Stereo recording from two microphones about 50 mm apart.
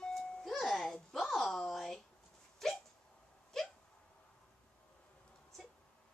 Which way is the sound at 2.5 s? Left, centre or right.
Centre.